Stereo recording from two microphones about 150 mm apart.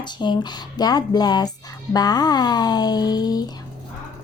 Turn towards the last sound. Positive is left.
turn(degrees=25)  # may be behind; listen again after turning